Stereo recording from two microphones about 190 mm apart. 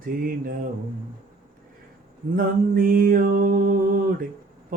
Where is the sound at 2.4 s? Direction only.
50° right (ahead or behind).